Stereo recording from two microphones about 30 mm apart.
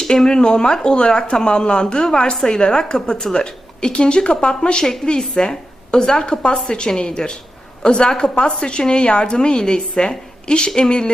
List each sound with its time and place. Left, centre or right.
0.3 s a woman's voice: left